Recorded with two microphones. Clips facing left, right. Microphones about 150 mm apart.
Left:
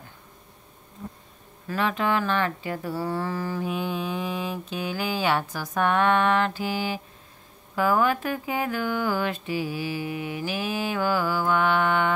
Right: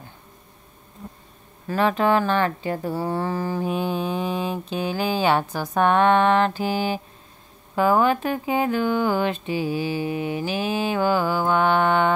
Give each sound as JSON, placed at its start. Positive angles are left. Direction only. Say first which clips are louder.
{"t": 1.7, "sound": "speech", "louder": "right 5 dB", "side_deg": -35}